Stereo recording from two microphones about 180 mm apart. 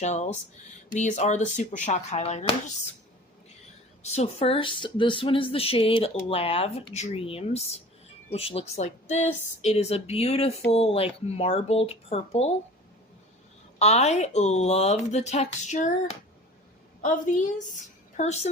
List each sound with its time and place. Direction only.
0.0 s speech: 40° left (ahead or behind)
4.0 s speech: 35° left (ahead or behind)
13.7 s a woman's voice: 40° left (ahead or behind)